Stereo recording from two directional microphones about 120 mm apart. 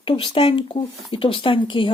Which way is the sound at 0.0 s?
45° left (ahead or behind).